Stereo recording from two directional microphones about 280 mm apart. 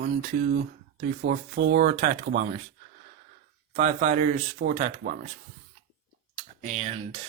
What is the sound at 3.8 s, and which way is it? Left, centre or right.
Speech, right.